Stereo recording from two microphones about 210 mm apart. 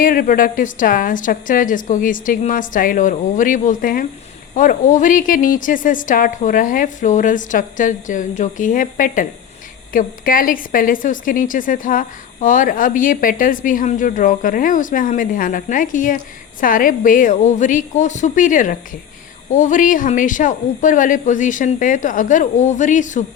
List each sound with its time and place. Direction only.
0.0 s a woman's voice: 40° left (ahead or behind)